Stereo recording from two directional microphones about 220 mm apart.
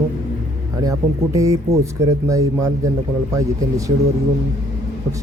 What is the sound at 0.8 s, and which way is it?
Speech, 15° right (ahead or behind).